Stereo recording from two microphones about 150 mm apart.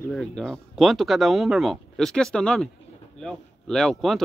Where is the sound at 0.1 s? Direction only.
5° left (ahead or behind).